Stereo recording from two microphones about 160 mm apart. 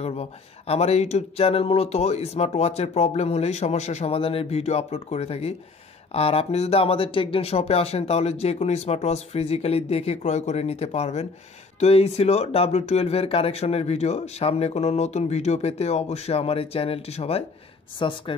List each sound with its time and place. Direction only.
0.0 s speech: 40° left (ahead or behind)